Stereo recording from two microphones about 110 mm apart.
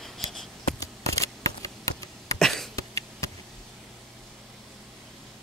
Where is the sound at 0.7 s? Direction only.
30° left (ahead or behind).